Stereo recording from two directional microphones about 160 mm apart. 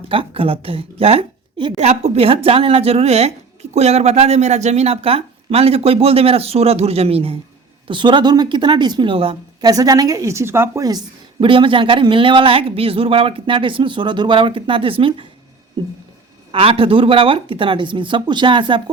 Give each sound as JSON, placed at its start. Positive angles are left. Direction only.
{"t": 0.1, "sound": "a woman's voice", "side_deg": -35}
{"t": 15.8, "sound": "a sound", "side_deg": -25}
{"t": 16.5, "sound": "a woman's voice", "side_deg": -35}